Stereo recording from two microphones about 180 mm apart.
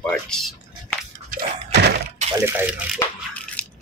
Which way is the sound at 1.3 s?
65° right (ahead or behind).